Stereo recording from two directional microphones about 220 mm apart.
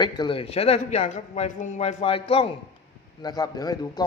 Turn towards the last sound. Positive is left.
turn(degrees=15)  # may be behind; listen again after turning